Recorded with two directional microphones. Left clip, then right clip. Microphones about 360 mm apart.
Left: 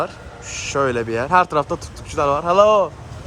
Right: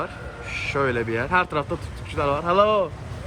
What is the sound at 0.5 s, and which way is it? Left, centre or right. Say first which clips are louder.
A man's voice: left 4 dB; centre.